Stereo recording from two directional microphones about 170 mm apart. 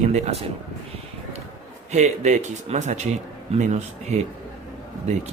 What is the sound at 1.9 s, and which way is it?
Speech, 45° right (ahead or behind).